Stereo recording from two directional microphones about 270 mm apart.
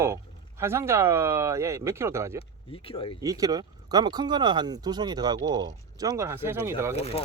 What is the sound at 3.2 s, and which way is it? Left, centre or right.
Speech, centre.